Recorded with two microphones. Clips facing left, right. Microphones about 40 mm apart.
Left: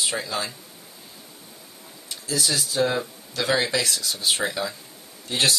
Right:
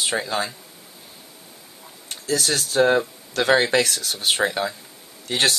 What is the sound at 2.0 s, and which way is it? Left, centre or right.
Speech, right.